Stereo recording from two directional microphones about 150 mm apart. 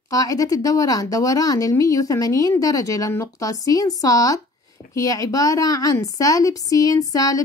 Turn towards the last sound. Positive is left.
turn(degrees=25)  # may be behind; listen again after turning